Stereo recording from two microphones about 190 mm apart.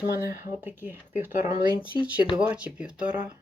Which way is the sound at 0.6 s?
10° right (ahead or behind).